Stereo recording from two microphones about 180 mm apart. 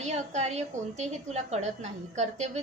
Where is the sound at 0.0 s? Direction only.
40° right (ahead or behind).